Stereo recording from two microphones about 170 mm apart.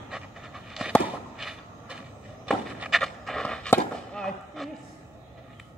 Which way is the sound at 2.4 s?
Centre (ahead or behind).